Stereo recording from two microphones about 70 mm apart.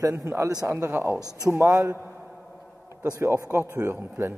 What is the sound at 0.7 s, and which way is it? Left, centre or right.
Speech, right.